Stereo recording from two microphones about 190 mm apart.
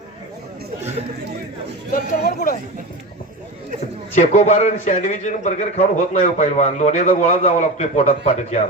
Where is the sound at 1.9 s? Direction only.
45° left (ahead or behind).